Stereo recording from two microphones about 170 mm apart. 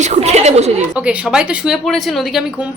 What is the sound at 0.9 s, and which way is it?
Speech, 5° right (ahead or behind).